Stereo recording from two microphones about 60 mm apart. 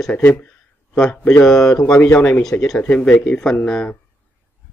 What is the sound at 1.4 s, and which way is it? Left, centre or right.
Speech, centre.